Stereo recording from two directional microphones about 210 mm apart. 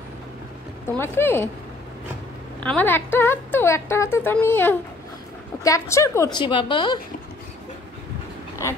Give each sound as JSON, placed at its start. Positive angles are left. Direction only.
{"t": 0.9, "sound": "a woman's voice", "side_deg": 10}
{"t": 2.6, "sound": "a woman's voice", "side_deg": 5}